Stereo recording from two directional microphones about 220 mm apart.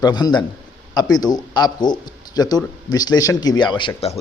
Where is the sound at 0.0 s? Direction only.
20° left (ahead or behind).